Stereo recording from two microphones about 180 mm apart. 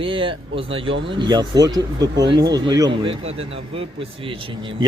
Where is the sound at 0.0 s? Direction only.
30° right (ahead or behind).